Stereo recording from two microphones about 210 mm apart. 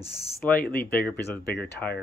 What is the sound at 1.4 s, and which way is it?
Speech, 50° left (ahead or behind).